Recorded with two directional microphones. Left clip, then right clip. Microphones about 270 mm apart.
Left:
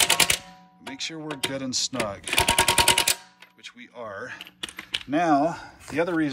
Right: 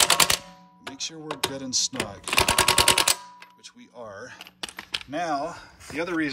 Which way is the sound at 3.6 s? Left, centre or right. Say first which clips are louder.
Left 5 dB; centre.